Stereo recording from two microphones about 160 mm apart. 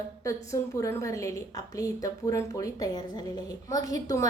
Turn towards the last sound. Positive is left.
turn(degrees=20)  # may be behind; listen again after turning